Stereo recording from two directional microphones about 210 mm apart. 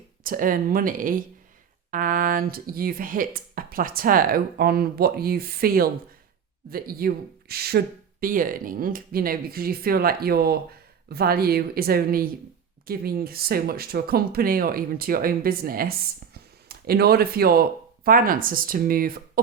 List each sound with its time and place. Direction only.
0.3 s speech: 40° right (ahead or behind)